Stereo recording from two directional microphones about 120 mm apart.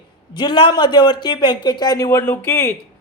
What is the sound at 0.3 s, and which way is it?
Speech, 40° left (ahead or behind).